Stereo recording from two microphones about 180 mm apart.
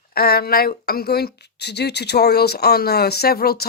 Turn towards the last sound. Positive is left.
turn(degrees=60)  # may be behind; listen again after turning